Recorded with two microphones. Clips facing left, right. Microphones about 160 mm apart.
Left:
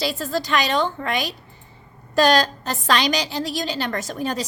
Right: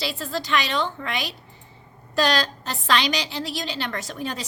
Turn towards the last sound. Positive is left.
turn(degrees=40)  # may be behind; listen again after turning